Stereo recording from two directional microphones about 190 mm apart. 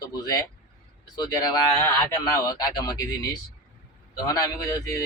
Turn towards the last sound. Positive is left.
turn(degrees=20)  # may be behind; listen again after turning